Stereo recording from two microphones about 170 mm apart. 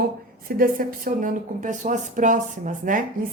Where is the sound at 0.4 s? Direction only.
60° right (ahead or behind).